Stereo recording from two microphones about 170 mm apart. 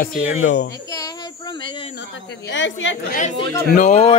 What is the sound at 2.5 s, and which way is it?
Speech, 90° left.